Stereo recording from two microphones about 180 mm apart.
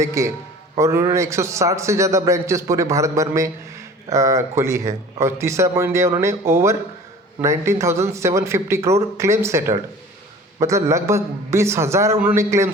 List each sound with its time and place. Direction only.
0.0 s a man's voice: 15° right (ahead or behind)